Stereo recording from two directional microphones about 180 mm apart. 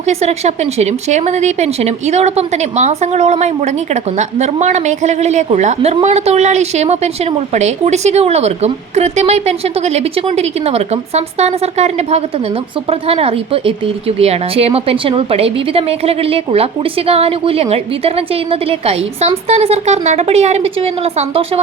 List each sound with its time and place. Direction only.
0.0 s a woman's voice: 35° right (ahead or behind)